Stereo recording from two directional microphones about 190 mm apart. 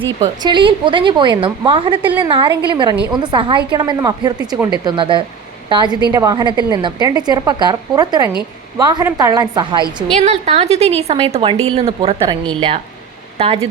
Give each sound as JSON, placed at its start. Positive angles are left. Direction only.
{"t": 0.0, "sound": "a woman's voice", "side_deg": -25}
{"t": 10.2, "sound": "a woman's voice", "side_deg": -35}